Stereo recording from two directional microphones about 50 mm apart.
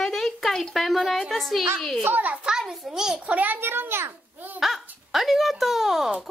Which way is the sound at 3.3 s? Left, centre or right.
Right.